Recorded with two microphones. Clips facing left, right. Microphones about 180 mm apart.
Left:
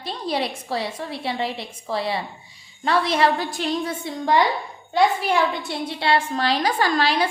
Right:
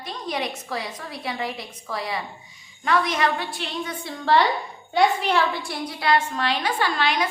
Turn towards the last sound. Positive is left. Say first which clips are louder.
# left 3 dB
turn(degrees=35)  # may be behind; listen again after turning